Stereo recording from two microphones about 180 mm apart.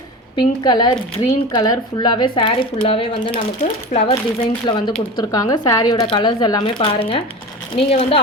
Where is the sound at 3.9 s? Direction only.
45° left (ahead or behind).